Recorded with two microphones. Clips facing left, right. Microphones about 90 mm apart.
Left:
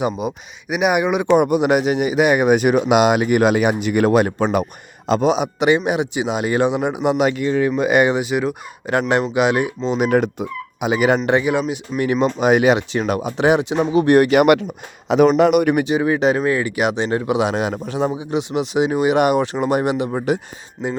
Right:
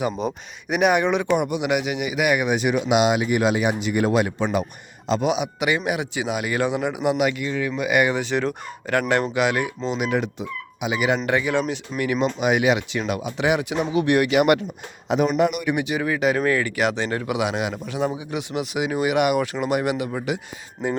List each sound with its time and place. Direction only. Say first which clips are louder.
0.2 s speech: left 2 dB; 5° left (ahead or behind)
1.4 s speech: left 7 dB; 45° left (ahead or behind)
2.5 s speech: left 6 dB; 50° left (ahead or behind)
5.2 s speech: left 7 dB; 35° left (ahead or behind)
8.1 s speech: left 3 dB; 10° left (ahead or behind)
8.9 s speech: left 3 dB; 20° left (ahead or behind)
10.0 s speech: left 8 dB; 45° left (ahead or behind)
11.3 s speech: left 4 dB; 25° left (ahead or behind); by 14.4 s 45° left (ahead or behind)
15.4 s speech: left 7 dB; 65° left (ahead or behind)
15.8 s speech: left 5 dB; 30° left (ahead or behind)